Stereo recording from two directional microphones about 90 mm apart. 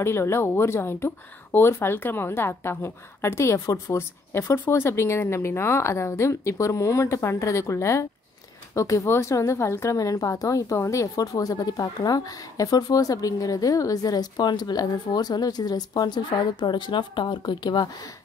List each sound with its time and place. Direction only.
0.0 s a woman's voice: 30° left (ahead or behind); by 17.8 s 60° left (ahead or behind)